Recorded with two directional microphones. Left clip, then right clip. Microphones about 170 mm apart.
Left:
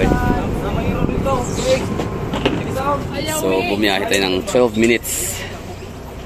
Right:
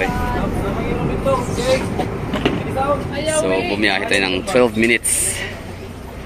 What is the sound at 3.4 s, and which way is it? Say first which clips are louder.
Speech: left 1 dB; 15° left (ahead or behind).